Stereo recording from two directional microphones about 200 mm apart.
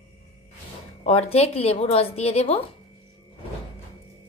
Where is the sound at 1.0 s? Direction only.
30° left (ahead or behind).